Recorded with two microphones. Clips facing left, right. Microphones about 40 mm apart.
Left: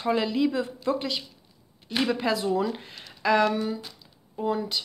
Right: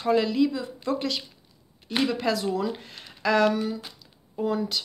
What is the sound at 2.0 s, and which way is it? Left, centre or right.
Speech, left.